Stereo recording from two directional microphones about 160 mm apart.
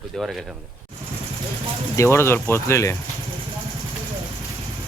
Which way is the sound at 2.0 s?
15° left (ahead or behind).